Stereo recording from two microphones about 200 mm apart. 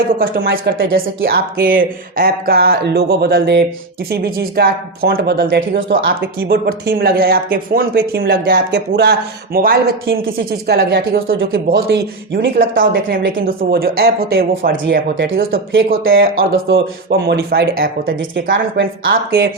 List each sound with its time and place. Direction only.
0.2 s speech: 50° right (ahead or behind)
19.1 s speech: 50° right (ahead or behind)